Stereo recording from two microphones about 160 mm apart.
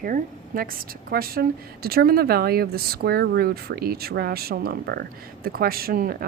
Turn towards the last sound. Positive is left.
turn(degrees=-65)  # may be behind; listen again after turning